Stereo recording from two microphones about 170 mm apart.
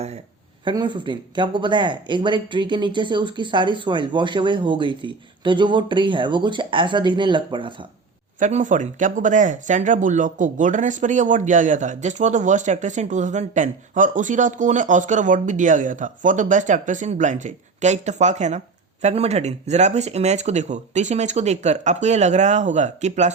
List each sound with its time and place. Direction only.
0.6 s speech: 25° right (ahead or behind)
8.4 s speech: 45° right (ahead or behind)